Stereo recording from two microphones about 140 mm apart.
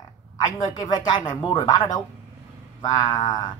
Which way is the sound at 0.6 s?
25° left (ahead or behind).